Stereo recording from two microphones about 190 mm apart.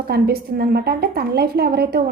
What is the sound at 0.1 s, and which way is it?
A woman's voice, 55° right (ahead or behind).